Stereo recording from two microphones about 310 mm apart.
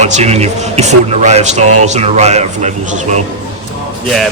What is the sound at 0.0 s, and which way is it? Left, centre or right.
Speech, right.